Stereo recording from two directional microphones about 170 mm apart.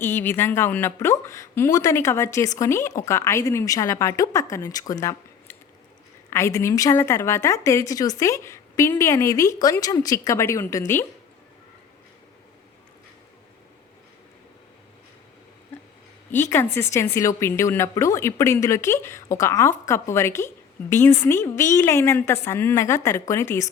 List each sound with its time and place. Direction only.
0.0 s speech: 15° left (ahead or behind)
16.3 s speech: 15° left (ahead or behind)